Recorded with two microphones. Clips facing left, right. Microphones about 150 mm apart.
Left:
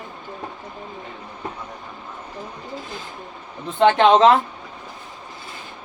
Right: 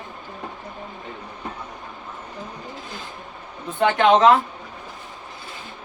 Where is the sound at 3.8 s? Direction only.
30° left (ahead or behind).